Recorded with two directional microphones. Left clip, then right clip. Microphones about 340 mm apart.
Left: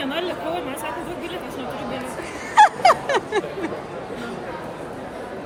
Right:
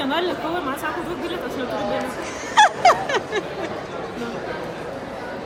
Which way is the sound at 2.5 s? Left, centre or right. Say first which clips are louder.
Left 1 dB; centre.